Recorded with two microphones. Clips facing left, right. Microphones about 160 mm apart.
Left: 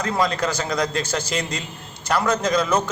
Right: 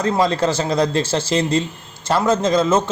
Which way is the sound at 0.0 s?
25° right (ahead or behind).